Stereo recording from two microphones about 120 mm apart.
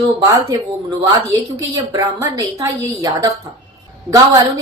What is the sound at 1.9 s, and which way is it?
Speech, 25° right (ahead or behind).